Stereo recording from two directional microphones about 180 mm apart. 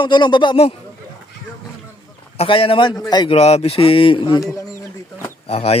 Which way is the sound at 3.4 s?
35° left (ahead or behind).